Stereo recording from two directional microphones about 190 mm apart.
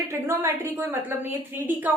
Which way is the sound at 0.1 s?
15° right (ahead or behind).